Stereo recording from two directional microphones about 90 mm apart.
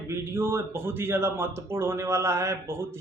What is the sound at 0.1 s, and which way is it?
Speech, 25° right (ahead or behind).